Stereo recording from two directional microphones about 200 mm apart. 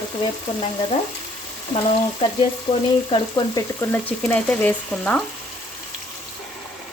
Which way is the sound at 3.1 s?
20° left (ahead or behind).